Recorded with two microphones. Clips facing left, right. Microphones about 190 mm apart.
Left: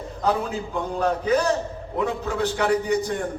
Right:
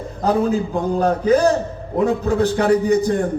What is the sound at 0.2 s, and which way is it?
A man's voice, 35° right (ahead or behind).